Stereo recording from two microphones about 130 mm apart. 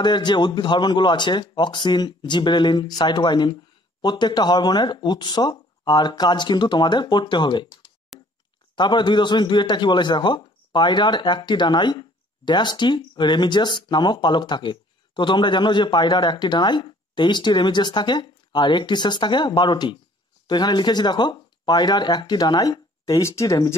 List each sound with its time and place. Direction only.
0.0 s a man's voice: 35° left (ahead or behind)
8.1 s a sound: 5° right (ahead or behind)
8.7 s a man's voice: 35° left (ahead or behind)